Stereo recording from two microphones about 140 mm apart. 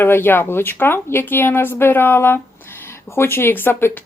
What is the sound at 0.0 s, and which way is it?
Speech, 15° left (ahead or behind).